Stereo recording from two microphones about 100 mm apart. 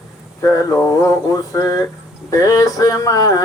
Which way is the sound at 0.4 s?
30° left (ahead or behind).